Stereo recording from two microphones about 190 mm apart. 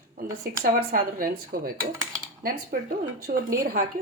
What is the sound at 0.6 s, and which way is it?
A woman's voice, 55° right (ahead or behind).